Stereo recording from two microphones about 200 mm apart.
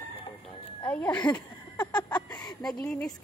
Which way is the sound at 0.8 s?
5° left (ahead or behind).